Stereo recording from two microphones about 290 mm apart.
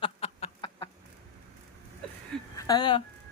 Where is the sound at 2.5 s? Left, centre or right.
Centre.